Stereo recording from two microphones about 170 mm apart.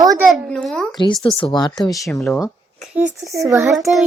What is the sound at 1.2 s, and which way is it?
Speech, 30° left (ahead or behind).